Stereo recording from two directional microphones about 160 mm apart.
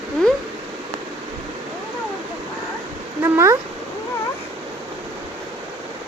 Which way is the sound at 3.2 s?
15° right (ahead or behind).